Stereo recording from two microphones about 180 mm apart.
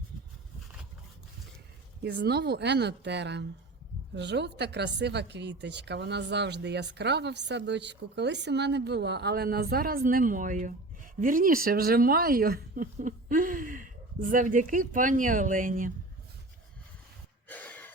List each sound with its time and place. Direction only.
2.0 s speech: 65° right (ahead or behind); by 15.9 s 50° right (ahead or behind)
17.5 s gasp: 10° left (ahead or behind)